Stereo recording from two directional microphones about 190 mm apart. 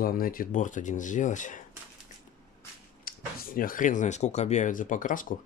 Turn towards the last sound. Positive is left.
turn(degrees=45)  # may be behind; listen again after turning